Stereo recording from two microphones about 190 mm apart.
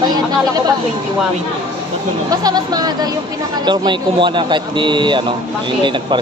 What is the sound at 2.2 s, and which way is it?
Speech, 20° right (ahead or behind).